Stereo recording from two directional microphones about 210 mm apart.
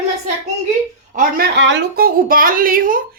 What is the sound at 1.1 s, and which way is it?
A woman's voice, 50° right (ahead or behind).